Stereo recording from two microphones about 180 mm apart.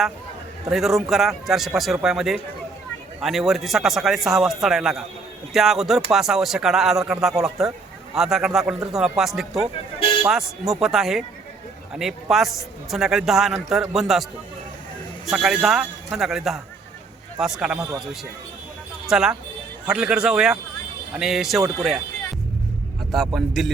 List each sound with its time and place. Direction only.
0.7 s a man's voice: centre (ahead or behind)
15.3 s a man's voice: centre (ahead or behind)
23.1 s a man's voice: centre (ahead or behind)